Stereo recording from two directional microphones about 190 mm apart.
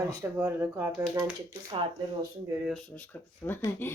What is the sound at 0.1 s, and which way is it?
Speech, 15° right (ahead or behind).